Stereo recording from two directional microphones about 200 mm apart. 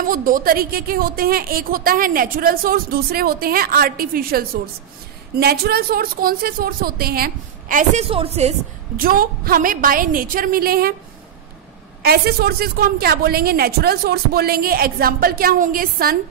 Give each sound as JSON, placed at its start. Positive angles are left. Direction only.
{"t": 0.0, "sound": "a woman's voice", "side_deg": -45}
{"t": 8.9, "sound": "a woman's voice", "side_deg": -45}
{"t": 12.0, "sound": "a woman's voice", "side_deg": -50}